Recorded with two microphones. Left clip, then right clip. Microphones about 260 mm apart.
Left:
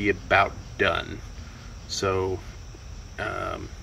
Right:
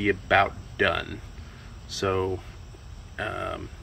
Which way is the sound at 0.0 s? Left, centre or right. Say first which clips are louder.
Even; centre.